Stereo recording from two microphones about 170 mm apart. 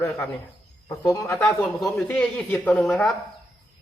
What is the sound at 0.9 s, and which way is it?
Speech, 15° left (ahead or behind).